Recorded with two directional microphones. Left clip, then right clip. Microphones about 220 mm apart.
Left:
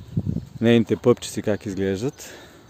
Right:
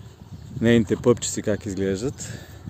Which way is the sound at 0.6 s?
Centre (ahead or behind).